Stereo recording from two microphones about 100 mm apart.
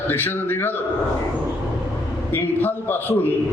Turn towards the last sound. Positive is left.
turn(degrees=20)  # may be behind; listen again after turning